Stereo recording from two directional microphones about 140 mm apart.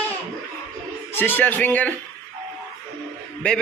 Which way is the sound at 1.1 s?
15° left (ahead or behind).